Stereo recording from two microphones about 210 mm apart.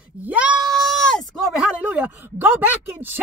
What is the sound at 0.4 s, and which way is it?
Sheep, 5° right (ahead or behind).